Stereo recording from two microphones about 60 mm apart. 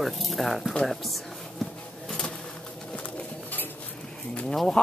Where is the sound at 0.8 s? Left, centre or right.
Centre.